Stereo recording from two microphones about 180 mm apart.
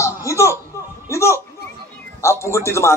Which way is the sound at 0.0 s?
15° left (ahead or behind).